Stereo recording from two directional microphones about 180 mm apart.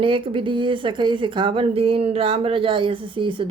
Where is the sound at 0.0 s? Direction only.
30° right (ahead or behind).